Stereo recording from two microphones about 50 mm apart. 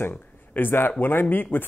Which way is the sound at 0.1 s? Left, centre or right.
Left.